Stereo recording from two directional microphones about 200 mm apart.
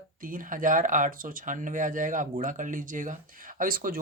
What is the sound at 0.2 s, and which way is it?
Speech, 45° right (ahead or behind).